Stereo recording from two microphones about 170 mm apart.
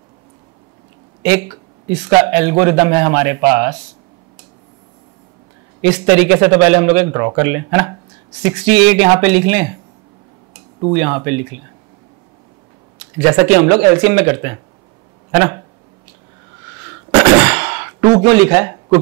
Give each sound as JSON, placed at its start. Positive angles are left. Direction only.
{"t": 1.2, "sound": "a man's voice", "side_deg": -10}
{"t": 5.8, "sound": "a man's voice", "side_deg": -10}
{"t": 10.9, "sound": "a man's voice", "side_deg": -20}
{"t": 13.2, "sound": "a man's voice", "side_deg": -15}
{"t": 17.1, "sound": "a sound", "side_deg": -15}
{"t": 18.3, "sound": "a man's voice", "side_deg": -15}